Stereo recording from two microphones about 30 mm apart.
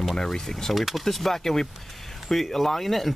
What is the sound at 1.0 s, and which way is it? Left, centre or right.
Speech, centre.